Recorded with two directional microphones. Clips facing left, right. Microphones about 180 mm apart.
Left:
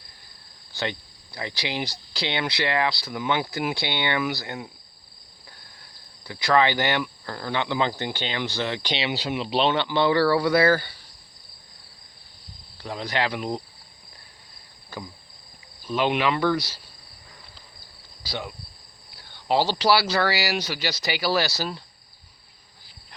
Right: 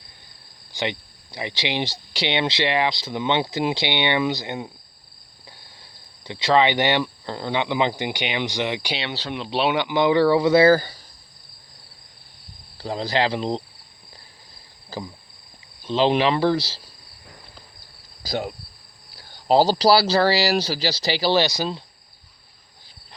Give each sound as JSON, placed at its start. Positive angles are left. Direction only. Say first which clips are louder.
{"t": 0.7, "sound": "speech", "louder": "right 3 dB", "side_deg": -20}
{"t": 6.2, "sound": "speech", "louder": "right 2 dB", "side_deg": -25}
{"t": 9.0, "sound": "speech", "louder": "left 2 dB", "side_deg": 10}
{"t": 9.6, "sound": "speech", "louder": "right 3 dB", "side_deg": -15}
{"t": 10.8, "sound": "speech", "louder": "right 5 dB", "side_deg": -40}
{"t": 12.7, "sound": "speech", "louder": "right 5 dB", "side_deg": -30}
{"t": 15.9, "sound": "speech", "louder": "right 4 dB", "side_deg": -30}
{"t": 18.2, "sound": "speech", "louder": "right 6 dB", "side_deg": -45}